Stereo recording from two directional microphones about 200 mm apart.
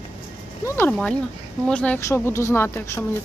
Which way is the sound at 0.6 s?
10° left (ahead or behind).